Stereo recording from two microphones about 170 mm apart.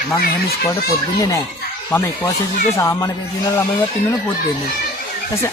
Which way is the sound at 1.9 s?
15° left (ahead or behind).